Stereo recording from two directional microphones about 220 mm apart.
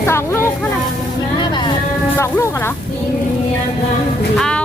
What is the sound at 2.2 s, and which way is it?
Speech, 10° left (ahead or behind).